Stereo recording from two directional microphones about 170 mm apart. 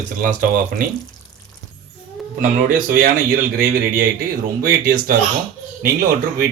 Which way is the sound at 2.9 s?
60° right (ahead or behind).